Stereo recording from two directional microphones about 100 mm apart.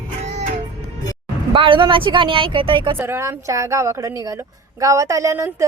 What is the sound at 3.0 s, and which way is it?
Speech, 25° right (ahead or behind).